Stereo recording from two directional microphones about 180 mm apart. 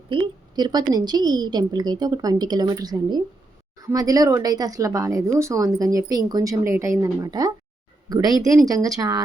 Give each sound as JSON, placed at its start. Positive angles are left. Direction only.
{"t": 0.1, "sound": "speech", "side_deg": -25}